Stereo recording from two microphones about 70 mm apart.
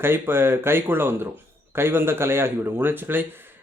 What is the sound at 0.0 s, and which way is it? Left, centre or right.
Speech, right.